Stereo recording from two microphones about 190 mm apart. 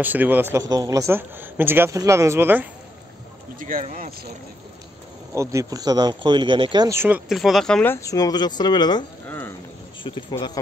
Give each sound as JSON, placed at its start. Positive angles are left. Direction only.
{"t": 0.0, "sound": "speech", "side_deg": -10}
{"t": 3.5, "sound": "speech", "side_deg": -45}
{"t": 5.3, "sound": "speech", "side_deg": -15}